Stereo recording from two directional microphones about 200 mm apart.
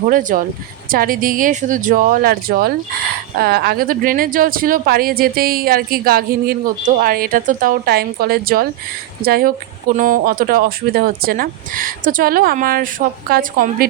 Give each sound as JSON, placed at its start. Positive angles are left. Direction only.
{"t": 0.1, "sound": "speech", "side_deg": -40}